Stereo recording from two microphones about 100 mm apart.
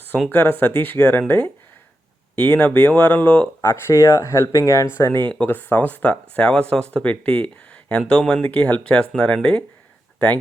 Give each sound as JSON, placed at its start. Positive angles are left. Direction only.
{"t": 0.1, "sound": "speech", "side_deg": 15}
{"t": 2.3, "sound": "speech", "side_deg": 15}
{"t": 3.6, "sound": "speech", "side_deg": 25}